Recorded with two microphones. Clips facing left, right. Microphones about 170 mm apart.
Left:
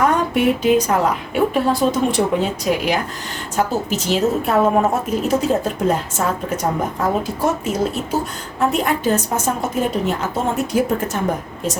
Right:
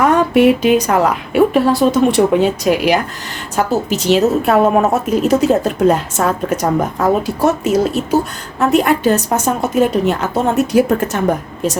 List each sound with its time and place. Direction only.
0.0 s speech: 75° right (ahead or behind)